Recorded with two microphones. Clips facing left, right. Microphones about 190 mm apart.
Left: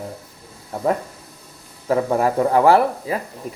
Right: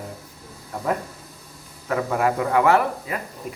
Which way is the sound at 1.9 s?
35° left (ahead or behind).